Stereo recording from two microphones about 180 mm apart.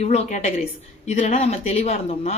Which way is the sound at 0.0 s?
35° left (ahead or behind).